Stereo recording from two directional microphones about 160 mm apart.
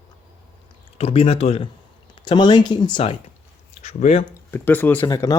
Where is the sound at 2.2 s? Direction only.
30° left (ahead or behind).